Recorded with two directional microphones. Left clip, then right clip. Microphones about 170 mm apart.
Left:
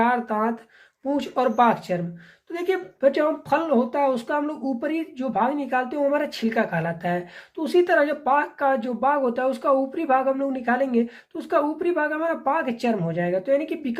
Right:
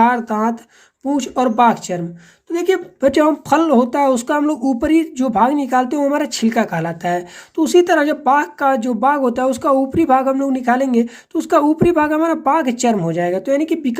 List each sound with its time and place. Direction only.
0.0 s speech: 35° right (ahead or behind)